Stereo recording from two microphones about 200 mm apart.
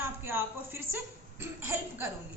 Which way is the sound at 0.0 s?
10° right (ahead or behind).